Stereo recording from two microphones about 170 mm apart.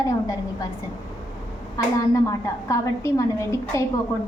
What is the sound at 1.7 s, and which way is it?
A woman's voice, 20° left (ahead or behind).